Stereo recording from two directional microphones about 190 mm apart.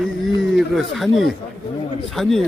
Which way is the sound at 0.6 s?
Centre (ahead or behind).